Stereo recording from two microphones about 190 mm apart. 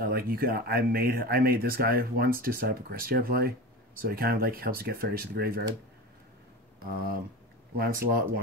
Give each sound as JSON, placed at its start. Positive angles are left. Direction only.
{"t": 0.0, "sound": "speech", "side_deg": -50}
{"t": 7.7, "sound": "speech", "side_deg": -50}